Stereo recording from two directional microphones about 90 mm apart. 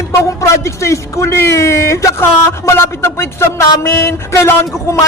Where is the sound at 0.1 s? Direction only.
35° left (ahead or behind).